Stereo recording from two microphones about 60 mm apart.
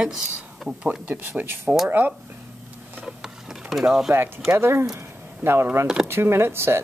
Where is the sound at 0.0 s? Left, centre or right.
Centre.